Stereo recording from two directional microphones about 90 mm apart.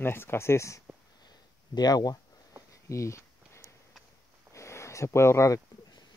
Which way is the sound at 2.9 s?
35° left (ahead or behind).